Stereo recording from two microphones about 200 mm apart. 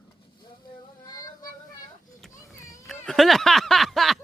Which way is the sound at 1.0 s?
20° left (ahead or behind).